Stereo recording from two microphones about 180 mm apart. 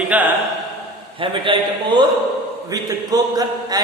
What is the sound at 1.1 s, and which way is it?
A man's voice, 30° right (ahead or behind).